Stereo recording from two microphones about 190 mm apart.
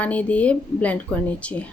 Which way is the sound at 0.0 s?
5° left (ahead or behind).